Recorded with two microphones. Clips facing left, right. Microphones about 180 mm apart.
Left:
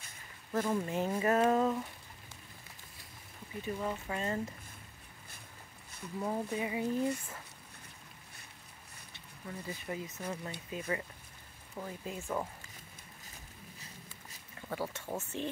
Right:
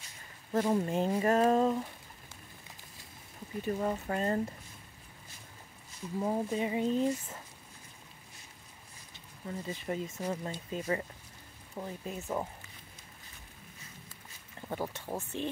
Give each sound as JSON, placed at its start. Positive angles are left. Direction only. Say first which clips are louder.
{"t": 0.5, "sound": "speech", "louder": "right 4 dB", "side_deg": -30}
{"t": 3.8, "sound": "speech", "louder": "right 4 dB", "side_deg": -40}
{"t": 6.1, "sound": "speech", "louder": "right 4 dB", "side_deg": -20}
{"t": 9.5, "sound": "speech", "louder": "right 4 dB", "side_deg": -25}
{"t": 11.7, "sound": "speech", "louder": "right 2 dB", "side_deg": -20}
{"t": 14.7, "sound": "speech", "louder": "right 1 dB", "side_deg": -15}